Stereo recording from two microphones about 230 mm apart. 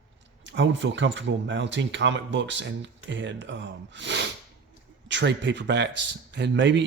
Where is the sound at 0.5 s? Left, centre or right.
Right.